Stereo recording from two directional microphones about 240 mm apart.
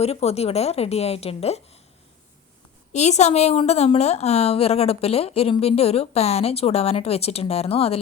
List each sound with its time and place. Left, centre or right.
0.0 s a woman's voice: left
2.9 s a woman's voice: left